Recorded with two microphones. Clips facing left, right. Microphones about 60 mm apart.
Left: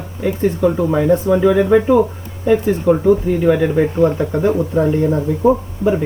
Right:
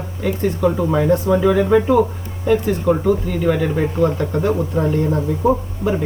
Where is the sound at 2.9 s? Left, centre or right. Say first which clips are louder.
Left 5 dB; left.